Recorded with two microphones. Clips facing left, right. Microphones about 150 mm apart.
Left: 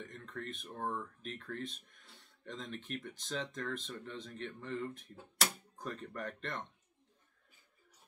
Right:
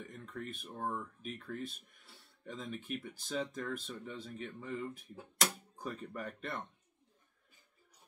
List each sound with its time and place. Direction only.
0.0 s speech: 5° right (ahead or behind)